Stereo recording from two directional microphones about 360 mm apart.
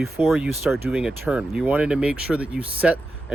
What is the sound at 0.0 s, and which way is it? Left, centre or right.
Speech, centre.